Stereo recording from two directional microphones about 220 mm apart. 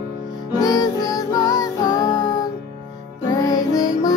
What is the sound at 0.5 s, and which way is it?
Music, 15° left (ahead or behind).